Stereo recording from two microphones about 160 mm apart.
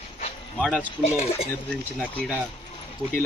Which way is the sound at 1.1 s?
40° left (ahead or behind).